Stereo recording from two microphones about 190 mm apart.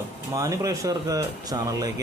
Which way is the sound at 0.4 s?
15° right (ahead or behind).